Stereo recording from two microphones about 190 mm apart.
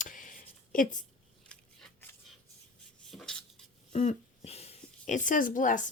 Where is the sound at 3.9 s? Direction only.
35° left (ahead or behind).